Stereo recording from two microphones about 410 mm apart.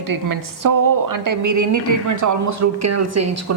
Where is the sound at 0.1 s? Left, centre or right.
Right.